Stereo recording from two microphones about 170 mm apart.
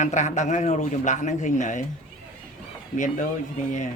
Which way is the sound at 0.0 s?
45° left (ahead or behind).